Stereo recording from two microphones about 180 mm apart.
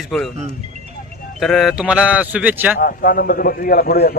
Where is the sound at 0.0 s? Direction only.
Centre (ahead or behind).